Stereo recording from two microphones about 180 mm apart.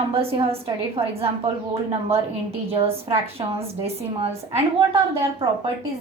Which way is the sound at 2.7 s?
30° right (ahead or behind).